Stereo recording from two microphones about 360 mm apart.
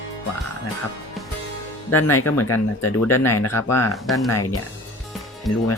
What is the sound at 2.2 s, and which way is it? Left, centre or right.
Speech, left.